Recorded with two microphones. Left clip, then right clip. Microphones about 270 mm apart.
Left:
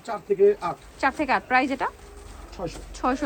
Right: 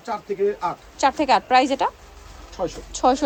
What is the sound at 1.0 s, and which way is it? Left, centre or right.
Speech, centre.